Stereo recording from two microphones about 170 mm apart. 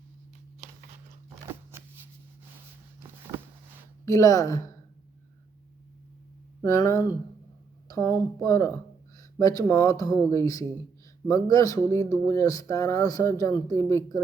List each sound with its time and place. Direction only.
4.0 s speech: 20° left (ahead or behind)
6.6 s speech: 20° left (ahead or behind)